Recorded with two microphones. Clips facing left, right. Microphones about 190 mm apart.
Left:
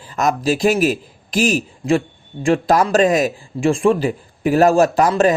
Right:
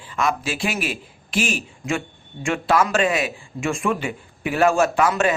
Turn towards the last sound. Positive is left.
turn(degrees=35)  # may be behind; listen again after turning